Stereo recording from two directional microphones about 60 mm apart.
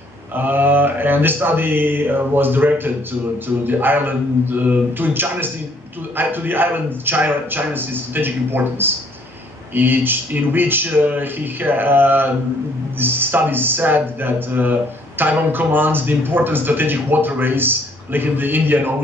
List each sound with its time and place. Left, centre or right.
0.4 s speech: right